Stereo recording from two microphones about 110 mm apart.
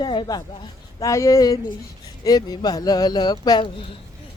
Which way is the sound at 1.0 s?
30° left (ahead or behind).